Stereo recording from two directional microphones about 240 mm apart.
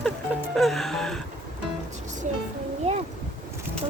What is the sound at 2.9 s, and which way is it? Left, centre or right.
Boat, right.